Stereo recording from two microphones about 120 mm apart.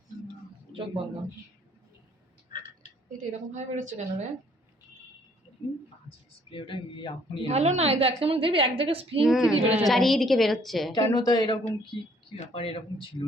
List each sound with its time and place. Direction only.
0.7 s speech: 50° right (ahead or behind)
3.1 s a woman's voice: 90° right
6.1 s speech: 45° left (ahead or behind)
7.4 s a woman's voice: 70° right (ahead or behind); by 9.2 s 50° right (ahead or behind)
9.2 s a woman's voice: 5° right (ahead or behind)
10.9 s speech: 35° left (ahead or behind)
12.5 s speech: 50° left (ahead or behind)